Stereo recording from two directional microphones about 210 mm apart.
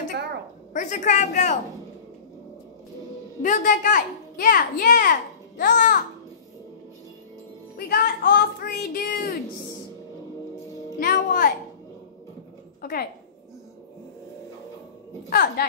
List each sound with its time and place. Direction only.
0.7 s a child's voice: 35° left (ahead or behind)
3.4 s a child's voice: 40° left (ahead or behind)
7.7 s speech: 45° left (ahead or behind)
11.0 s speech: 45° left (ahead or behind)
15.2 s speech: 45° left (ahead or behind)